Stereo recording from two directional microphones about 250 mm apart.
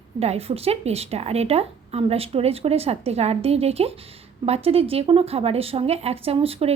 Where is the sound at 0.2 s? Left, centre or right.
Right.